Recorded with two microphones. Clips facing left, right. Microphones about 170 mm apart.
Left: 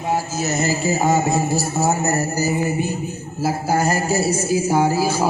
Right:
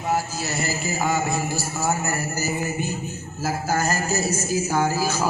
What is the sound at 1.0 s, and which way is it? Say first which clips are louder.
A man's voice: left 4 dB; 40° left (ahead or behind).